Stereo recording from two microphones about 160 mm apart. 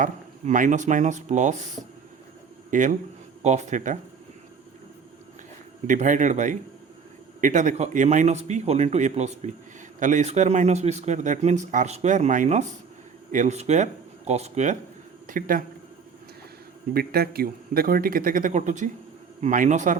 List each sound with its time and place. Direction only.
0.0 s speech: 55° right (ahead or behind)
2.6 s speech: 55° right (ahead or behind)
5.9 s speech: 55° right (ahead or behind)
15.3 s speech: 60° right (ahead or behind)
16.9 s speech: 70° right (ahead or behind); by 20.0 s 50° right (ahead or behind)